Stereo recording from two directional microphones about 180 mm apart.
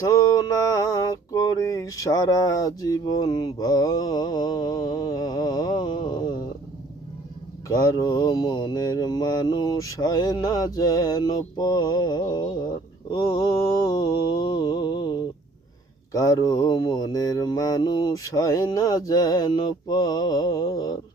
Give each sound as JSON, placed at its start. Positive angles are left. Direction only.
{"t": 0.1, "sound": "mantra", "side_deg": 20}
{"t": 7.7, "sound": "mantra", "side_deg": 15}